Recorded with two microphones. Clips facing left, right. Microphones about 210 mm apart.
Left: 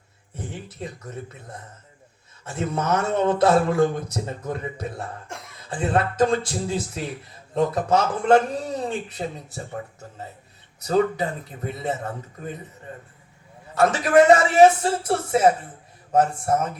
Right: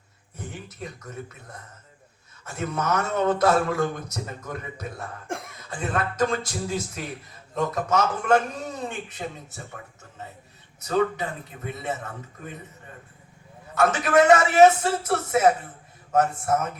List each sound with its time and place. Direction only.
0.3 s speech: 30° left (ahead or behind)
2.4 s a man's voice: 30° left (ahead or behind)
10.8 s a man's voice: 35° left (ahead or behind)
13.7 s a man's voice: 35° left (ahead or behind)